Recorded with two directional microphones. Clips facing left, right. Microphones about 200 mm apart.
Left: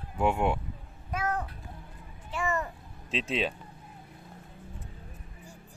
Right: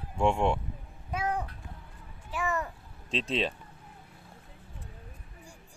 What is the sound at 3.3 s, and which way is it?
Speech, centre (ahead or behind).